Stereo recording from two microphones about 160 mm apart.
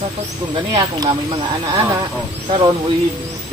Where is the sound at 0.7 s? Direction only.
25° right (ahead or behind).